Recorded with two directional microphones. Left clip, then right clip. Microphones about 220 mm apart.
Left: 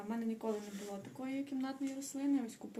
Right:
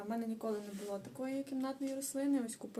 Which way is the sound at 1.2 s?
15° right (ahead or behind).